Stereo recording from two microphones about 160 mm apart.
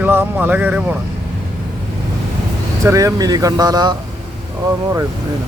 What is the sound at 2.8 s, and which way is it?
Speech, 20° right (ahead or behind).